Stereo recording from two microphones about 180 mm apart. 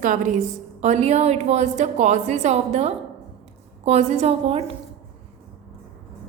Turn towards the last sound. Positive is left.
turn(degrees=-35)  # may be behind; listen again after turning